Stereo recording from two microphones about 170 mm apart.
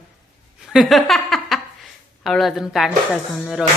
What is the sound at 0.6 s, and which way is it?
Speech, centre (ahead or behind).